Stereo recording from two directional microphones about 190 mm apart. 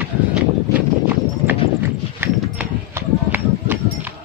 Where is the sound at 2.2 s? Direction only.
10° right (ahead or behind).